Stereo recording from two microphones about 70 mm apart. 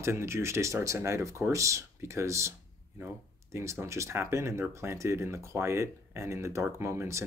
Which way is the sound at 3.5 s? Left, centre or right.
Right.